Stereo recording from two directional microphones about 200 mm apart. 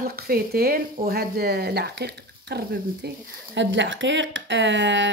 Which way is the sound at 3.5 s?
65° right (ahead or behind).